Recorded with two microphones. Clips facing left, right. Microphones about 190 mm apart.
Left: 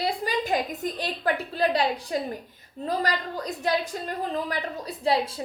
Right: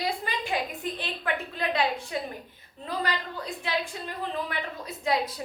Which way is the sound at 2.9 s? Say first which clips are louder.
Left 4 dB; 40° left (ahead or behind).